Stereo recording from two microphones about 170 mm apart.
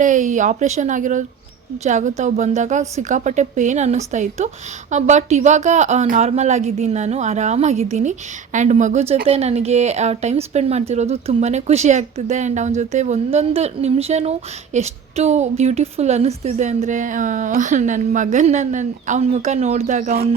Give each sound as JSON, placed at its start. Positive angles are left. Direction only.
{"t": 0.0, "sound": "a woman's voice", "side_deg": -50}